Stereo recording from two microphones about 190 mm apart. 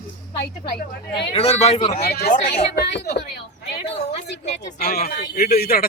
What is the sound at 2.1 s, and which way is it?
A woman's voice, 55° left (ahead or behind).